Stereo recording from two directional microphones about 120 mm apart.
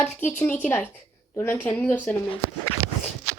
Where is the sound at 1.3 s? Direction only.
20° left (ahead or behind).